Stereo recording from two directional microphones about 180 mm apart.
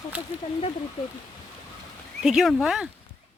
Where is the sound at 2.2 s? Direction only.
Centre (ahead or behind).